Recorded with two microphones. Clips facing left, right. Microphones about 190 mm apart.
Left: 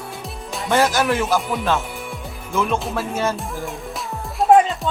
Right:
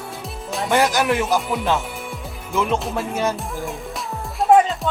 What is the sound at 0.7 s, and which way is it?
Speech, 15° right (ahead or behind).